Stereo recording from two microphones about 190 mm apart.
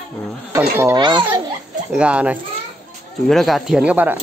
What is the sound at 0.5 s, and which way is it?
Speech, 15° right (ahead or behind).